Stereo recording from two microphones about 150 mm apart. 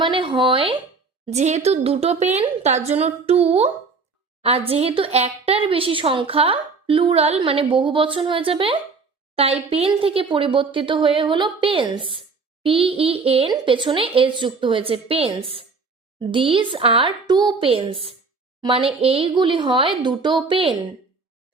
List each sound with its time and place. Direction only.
0.0 s speech: 35° right (ahead or behind)
1.3 s a woman's voice: 50° right (ahead or behind)